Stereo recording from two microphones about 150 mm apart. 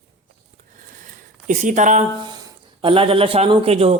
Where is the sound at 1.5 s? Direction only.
55° right (ahead or behind).